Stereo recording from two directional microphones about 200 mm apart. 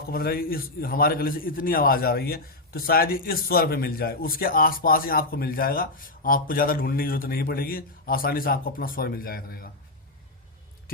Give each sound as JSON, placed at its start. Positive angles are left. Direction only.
{"t": 0.1, "sound": "a man's voice", "side_deg": 50}